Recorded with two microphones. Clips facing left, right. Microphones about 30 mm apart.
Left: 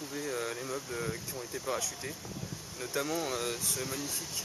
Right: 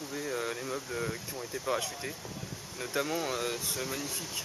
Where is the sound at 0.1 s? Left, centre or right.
Centre.